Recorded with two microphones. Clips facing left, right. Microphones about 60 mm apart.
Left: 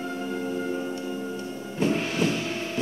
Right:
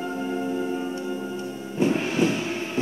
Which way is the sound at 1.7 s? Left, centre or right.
Right.